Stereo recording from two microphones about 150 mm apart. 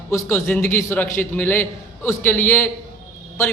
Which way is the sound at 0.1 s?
15° left (ahead or behind).